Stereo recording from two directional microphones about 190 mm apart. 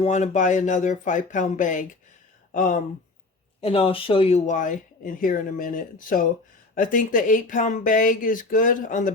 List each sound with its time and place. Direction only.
0.0 s speech: 40° left (ahead or behind)
3.6 s speech: 30° left (ahead or behind)